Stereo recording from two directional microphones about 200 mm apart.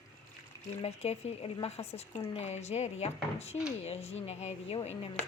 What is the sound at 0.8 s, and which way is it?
Speech, 30° left (ahead or behind).